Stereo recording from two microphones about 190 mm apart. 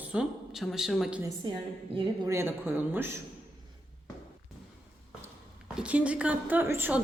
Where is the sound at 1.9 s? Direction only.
25° right (ahead or behind).